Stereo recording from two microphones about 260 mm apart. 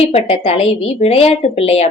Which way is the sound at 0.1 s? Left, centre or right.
Left.